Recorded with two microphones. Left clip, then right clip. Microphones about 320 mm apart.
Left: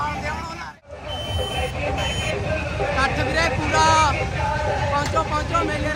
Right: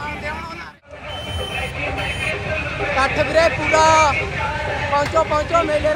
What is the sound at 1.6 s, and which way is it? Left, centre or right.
Vehicle, left.